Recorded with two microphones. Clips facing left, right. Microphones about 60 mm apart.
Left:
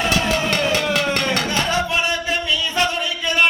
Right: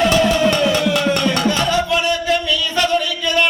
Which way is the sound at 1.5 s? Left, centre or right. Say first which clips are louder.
Right 4 dB; left.